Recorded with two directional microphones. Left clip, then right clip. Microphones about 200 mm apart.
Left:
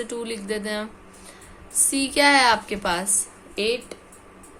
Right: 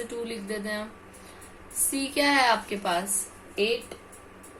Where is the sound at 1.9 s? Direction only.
45° left (ahead or behind).